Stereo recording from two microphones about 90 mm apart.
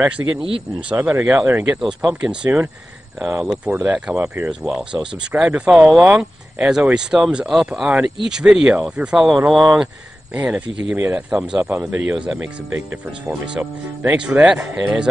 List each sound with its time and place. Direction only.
0.2 s speech: 35° right (ahead or behind)
0.7 s speech: 15° right (ahead or behind)
4.5 s speech: 5° right (ahead or behind)